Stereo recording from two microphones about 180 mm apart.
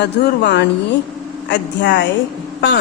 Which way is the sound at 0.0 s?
70° left (ahead or behind).